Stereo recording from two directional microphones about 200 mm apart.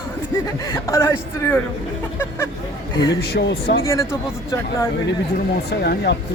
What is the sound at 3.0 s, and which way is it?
Speech, 60° left (ahead or behind).